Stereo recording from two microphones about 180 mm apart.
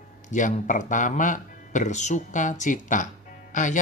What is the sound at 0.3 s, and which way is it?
Speech, 45° left (ahead or behind).